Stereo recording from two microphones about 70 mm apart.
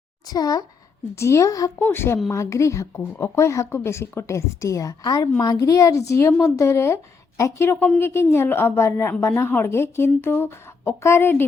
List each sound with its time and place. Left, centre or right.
0.3 s speech: left
1.1 s a woman's voice: left
1.8 s a woman's voice: left
2.3 s a woman's voice: left
5.0 s a woman's voice: left